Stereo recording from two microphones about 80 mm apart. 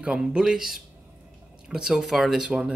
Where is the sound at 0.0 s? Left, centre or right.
Centre.